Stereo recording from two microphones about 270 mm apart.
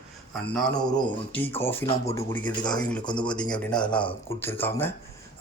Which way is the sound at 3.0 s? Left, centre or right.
Centre.